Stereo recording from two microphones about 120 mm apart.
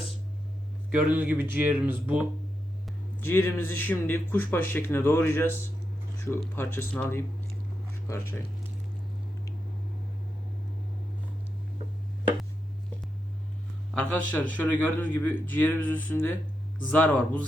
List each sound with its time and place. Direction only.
0.9 s speech: 10° right (ahead or behind)
3.2 s speech: 20° left (ahead or behind)
13.9 s speech: 10° left (ahead or behind)